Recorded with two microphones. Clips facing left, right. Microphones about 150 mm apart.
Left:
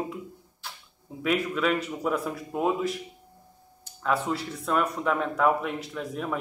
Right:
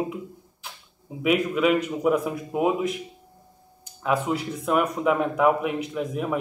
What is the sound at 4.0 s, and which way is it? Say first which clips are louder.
Speech: right 3 dB; 10° right (ahead or behind).